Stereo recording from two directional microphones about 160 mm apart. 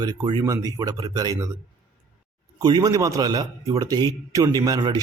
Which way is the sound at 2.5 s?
25° right (ahead or behind).